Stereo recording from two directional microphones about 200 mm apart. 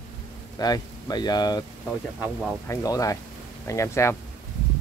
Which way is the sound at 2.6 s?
15° left (ahead or behind).